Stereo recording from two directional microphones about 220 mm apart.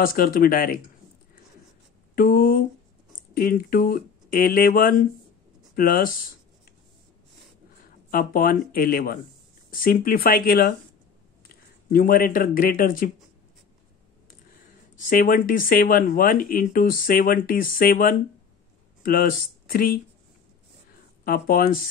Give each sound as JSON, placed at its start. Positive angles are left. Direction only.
{"t": 0.0, "sound": "speech", "side_deg": 40}
{"t": 2.1, "sound": "speech", "side_deg": 40}
{"t": 8.1, "sound": "speech", "side_deg": 40}
{"t": 15.0, "sound": "speech", "side_deg": 40}
{"t": 21.2, "sound": "speech", "side_deg": 40}